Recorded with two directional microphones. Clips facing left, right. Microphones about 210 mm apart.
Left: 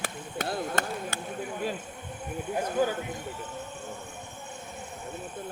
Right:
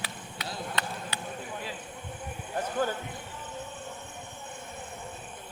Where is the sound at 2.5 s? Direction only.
10° left (ahead or behind).